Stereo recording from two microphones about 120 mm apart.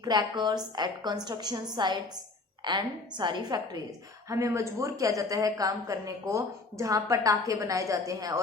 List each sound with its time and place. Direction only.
0.0 s a woman's voice: 35° right (ahead or behind)
4.3 s a woman's voice: 25° right (ahead or behind)